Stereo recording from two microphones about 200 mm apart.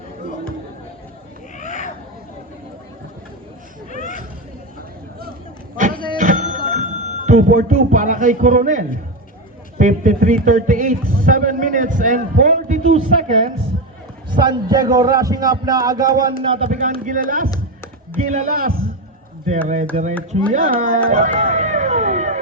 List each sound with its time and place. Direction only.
1.5 s a sound: 35° left (ahead or behind)
5.7 s a sound: 40° right (ahead or behind)
6.7 s speech: 40° right (ahead or behind)
14.3 s a man's voice: 20° right (ahead or behind)
16.6 s speech: 40° right (ahead or behind)
21.3 s music: 35° right (ahead or behind)